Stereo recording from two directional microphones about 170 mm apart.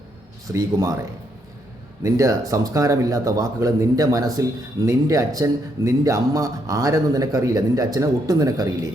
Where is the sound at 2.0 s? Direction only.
20° right (ahead or behind).